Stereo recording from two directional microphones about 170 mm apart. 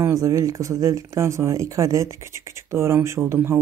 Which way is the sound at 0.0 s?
20° right (ahead or behind).